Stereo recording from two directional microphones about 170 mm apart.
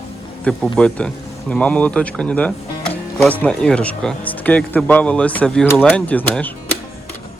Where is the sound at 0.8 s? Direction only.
5° left (ahead or behind).